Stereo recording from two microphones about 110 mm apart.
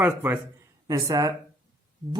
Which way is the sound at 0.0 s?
20° right (ahead or behind).